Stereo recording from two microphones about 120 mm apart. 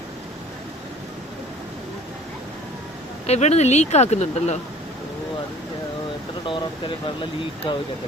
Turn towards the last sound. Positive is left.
turn(degrees=45)  # may be behind; listen again after turning